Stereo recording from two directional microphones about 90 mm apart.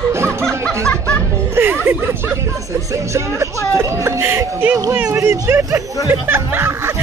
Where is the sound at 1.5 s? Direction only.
20° right (ahead or behind).